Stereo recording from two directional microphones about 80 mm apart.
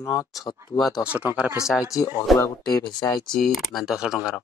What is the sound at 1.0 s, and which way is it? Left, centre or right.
Speech, centre.